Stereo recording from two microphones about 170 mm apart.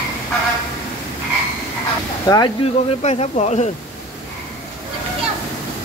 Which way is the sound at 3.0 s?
40° left (ahead or behind).